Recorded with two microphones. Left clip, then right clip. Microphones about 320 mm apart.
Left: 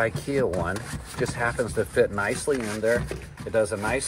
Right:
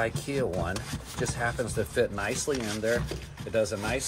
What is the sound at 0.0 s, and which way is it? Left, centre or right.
Speech, centre.